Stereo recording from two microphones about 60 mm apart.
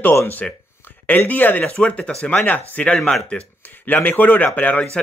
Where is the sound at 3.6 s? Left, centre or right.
Left.